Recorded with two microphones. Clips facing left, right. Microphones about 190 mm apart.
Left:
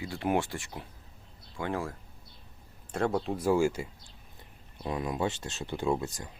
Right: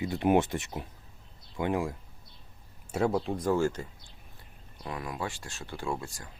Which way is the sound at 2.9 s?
5° right (ahead or behind).